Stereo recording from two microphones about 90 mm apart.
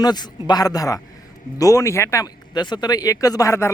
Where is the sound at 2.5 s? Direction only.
55° left (ahead or behind); by 3.7 s 35° left (ahead or behind).